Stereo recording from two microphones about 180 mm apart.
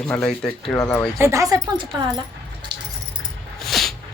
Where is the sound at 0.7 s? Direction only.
15° left (ahead or behind).